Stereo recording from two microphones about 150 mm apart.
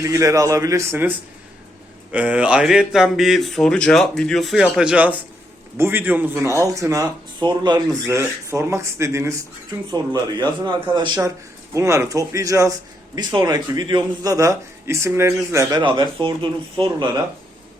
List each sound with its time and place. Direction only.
0.0 s speech: 20° right (ahead or behind)
2.1 s speech: 10° right (ahead or behind); by 7.8 s 30° right (ahead or behind)
8.0 s speech: 20° right (ahead or behind)
15.8 s speech: 30° right (ahead or behind)